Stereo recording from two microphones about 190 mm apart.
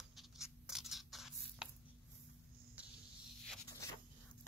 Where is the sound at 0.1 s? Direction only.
Centre (ahead or behind).